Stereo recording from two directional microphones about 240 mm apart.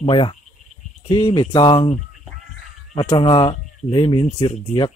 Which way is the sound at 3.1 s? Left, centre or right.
Centre.